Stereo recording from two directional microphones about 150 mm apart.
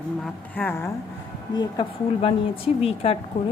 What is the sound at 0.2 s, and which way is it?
Speech, 10° left (ahead or behind).